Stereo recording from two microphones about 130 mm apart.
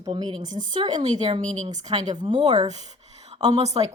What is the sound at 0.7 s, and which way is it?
Speech, 60° right (ahead or behind).